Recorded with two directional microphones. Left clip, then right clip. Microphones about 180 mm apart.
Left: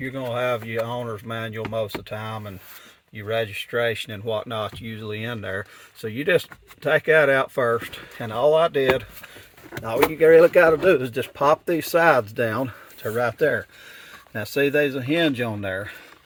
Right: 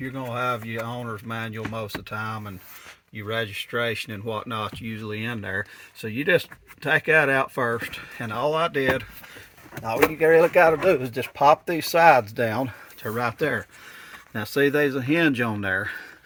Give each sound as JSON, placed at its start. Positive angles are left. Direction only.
{"t": 0.0, "sound": "speech", "side_deg": 35}
{"t": 3.2, "sound": "speech", "side_deg": 35}
{"t": 9.8, "sound": "speech", "side_deg": 45}
{"t": 12.4, "sound": "speech", "side_deg": 25}
{"t": 14.3, "sound": "speech", "side_deg": 5}